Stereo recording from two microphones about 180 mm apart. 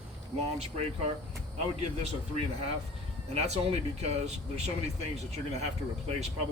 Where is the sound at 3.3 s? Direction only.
35° right (ahead or behind).